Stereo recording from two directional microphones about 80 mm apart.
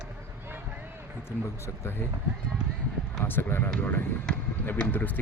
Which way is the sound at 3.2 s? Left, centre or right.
Left.